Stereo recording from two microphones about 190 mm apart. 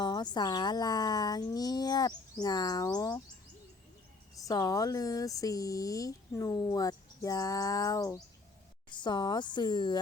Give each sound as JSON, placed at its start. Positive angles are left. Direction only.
{"t": 0.0, "sound": "speech", "side_deg": 25}
{"t": 4.4, "sound": "speech", "side_deg": 20}